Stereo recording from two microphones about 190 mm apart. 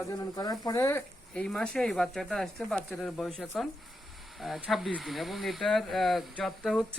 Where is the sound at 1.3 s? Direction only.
5° left (ahead or behind).